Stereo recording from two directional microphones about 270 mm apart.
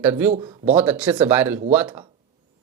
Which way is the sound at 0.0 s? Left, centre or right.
Centre.